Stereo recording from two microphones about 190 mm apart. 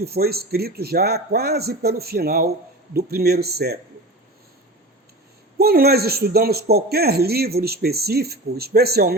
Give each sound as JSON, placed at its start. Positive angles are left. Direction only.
{"t": 0.0, "sound": "speech", "side_deg": -55}
{"t": 5.5, "sound": "speech", "side_deg": -55}